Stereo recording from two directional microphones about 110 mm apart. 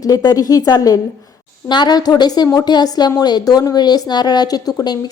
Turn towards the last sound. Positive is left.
turn(degrees=35)  # may be behind; listen again after turning